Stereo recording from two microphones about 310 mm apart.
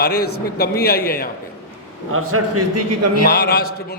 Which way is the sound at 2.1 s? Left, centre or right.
Right.